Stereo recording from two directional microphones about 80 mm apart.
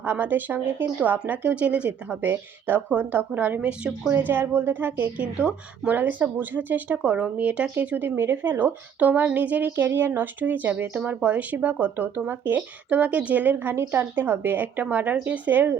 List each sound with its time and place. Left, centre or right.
0.0 s speech: right
4.1 s speech: right
5.2 s speech: centre